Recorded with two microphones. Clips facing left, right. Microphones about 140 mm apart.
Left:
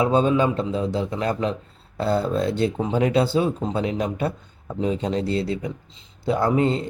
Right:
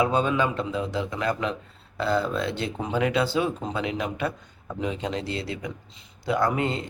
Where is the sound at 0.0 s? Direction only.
35° left (ahead or behind).